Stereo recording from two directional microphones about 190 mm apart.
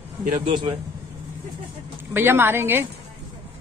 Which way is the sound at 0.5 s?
25° right (ahead or behind).